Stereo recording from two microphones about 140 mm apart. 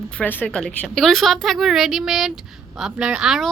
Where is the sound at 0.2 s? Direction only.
10° left (ahead or behind).